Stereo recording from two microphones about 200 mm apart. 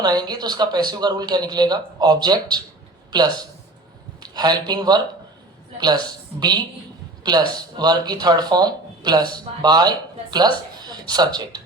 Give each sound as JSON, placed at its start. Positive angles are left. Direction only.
{"t": 0.0, "sound": "speech", "side_deg": -20}
{"t": 7.3, "sound": "speech", "side_deg": -20}